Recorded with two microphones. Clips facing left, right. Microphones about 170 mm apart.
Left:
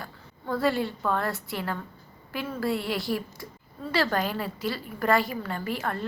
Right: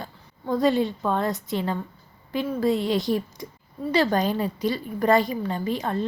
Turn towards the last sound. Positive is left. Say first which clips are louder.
# right 5 dB
turn(degrees=-20)  # may be behind; listen again after turning